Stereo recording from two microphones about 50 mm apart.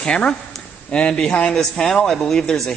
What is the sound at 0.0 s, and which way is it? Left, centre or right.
A man's voice, left.